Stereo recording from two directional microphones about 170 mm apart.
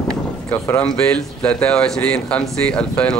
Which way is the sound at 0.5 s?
15° left (ahead or behind).